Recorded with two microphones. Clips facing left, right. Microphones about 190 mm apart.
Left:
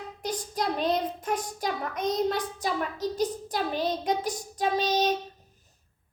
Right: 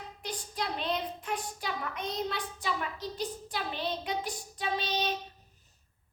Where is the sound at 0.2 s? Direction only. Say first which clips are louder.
Left 6 dB; 45° left (ahead or behind).